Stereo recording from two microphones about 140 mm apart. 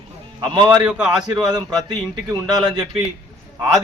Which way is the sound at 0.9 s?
10° right (ahead or behind).